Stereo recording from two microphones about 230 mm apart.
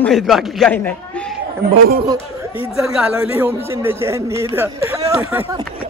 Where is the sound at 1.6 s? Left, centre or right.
Right.